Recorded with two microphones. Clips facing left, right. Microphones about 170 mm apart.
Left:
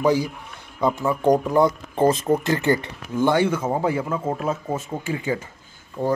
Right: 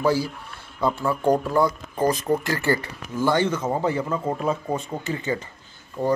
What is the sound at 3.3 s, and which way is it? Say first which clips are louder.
A man's voice: left 1 dB; 10° left (ahead or behind).